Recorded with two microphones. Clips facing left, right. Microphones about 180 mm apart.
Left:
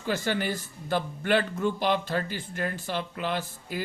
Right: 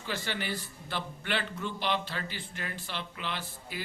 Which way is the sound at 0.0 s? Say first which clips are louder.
Left 7 dB; 45° left (ahead or behind).